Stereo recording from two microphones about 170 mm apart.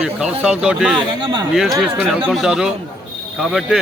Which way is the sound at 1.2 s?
25° right (ahead or behind).